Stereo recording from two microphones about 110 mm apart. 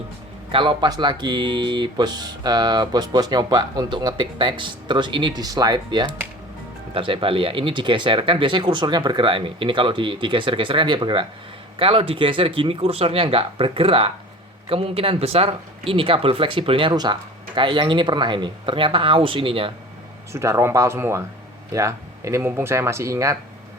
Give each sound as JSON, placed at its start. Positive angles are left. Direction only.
{"t": 0.5, "sound": "speech", "side_deg": -50}
{"t": 6.9, "sound": "speech", "side_deg": -50}
{"t": 16.9, "sound": "speech", "side_deg": -40}
{"t": 20.3, "sound": "speech", "side_deg": -25}